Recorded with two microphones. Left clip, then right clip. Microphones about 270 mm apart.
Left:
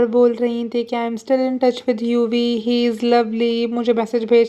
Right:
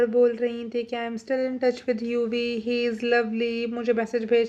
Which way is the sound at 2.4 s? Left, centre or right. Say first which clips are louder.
Left 7 dB; left.